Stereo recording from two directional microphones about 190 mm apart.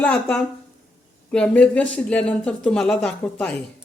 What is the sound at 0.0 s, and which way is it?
Speech, 5° left (ahead or behind).